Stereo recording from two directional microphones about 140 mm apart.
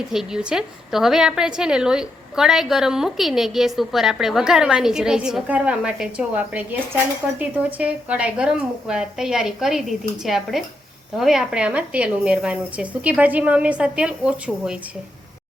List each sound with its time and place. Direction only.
0.1 s a woman's voice: 5° right (ahead or behind)